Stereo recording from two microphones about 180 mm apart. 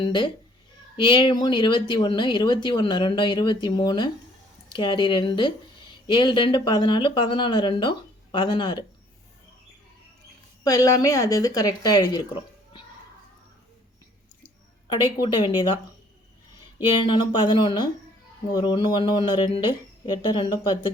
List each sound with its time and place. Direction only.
0.0 s speech: 25° left (ahead or behind)
10.6 s speech: 20° left (ahead or behind)
15.2 s speech: 25° left (ahead or behind)
17.1 s speech: 25° left (ahead or behind)